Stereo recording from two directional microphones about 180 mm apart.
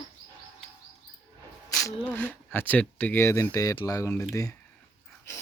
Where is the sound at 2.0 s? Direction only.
10° left (ahead or behind).